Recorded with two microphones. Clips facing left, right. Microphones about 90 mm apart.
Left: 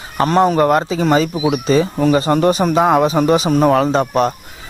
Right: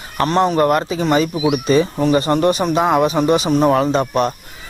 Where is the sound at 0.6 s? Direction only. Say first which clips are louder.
Left 2 dB; 30° left (ahead or behind).